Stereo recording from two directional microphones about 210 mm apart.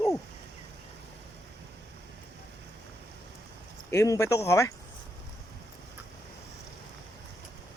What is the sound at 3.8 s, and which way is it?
Speech, 15° left (ahead or behind).